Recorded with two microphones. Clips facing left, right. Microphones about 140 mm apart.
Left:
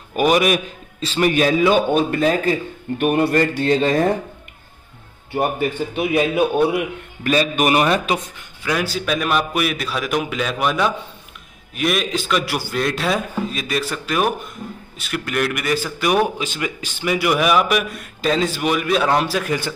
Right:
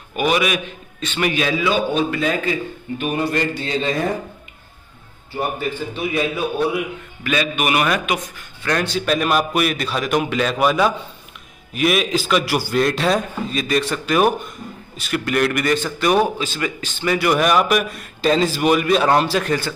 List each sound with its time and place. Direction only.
0.1 s a man's voice: 40° left (ahead or behind)
1.3 s a man's voice: 45° left (ahead or behind)
3.0 s a man's voice: 55° left (ahead or behind)
5.9 s a man's voice: 55° left (ahead or behind)
7.2 s speech: 40° left (ahead or behind)
8.6 s a man's voice: 5° left (ahead or behind)